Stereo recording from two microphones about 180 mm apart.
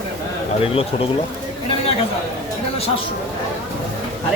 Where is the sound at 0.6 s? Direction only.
30° left (ahead or behind).